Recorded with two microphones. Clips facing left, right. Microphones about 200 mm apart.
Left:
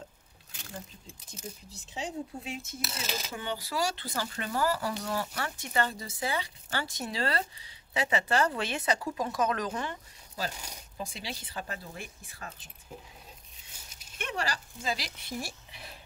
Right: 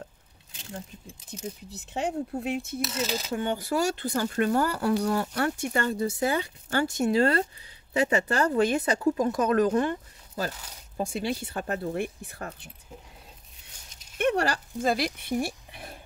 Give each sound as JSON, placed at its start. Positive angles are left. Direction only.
{"t": 2.0, "sound": "speech", "side_deg": -60}
{"t": 3.3, "sound": "speech", "side_deg": -50}
{"t": 10.5, "sound": "speech", "side_deg": 15}
{"t": 11.0, "sound": "speech", "side_deg": -55}
{"t": 14.1, "sound": "speech", "side_deg": -55}